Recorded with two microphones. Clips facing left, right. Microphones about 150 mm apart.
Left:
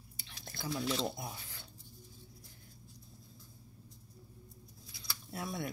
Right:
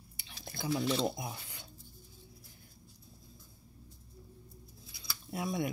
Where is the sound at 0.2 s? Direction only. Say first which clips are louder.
Right 3 dB; 15° right (ahead or behind).